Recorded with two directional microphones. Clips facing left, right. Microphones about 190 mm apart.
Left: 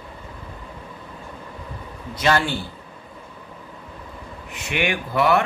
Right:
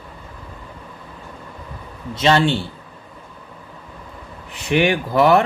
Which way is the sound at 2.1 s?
25° right (ahead or behind).